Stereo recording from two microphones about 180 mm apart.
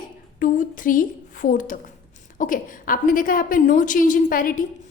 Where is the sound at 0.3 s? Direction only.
45° left (ahead or behind).